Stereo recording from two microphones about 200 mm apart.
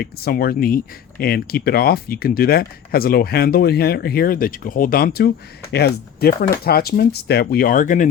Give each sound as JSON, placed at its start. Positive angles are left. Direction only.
{"t": 0.0, "sound": "speech", "side_deg": 50}